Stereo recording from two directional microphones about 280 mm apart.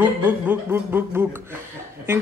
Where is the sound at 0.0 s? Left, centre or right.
Centre.